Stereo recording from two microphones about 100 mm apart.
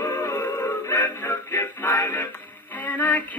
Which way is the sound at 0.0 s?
30° left (ahead or behind).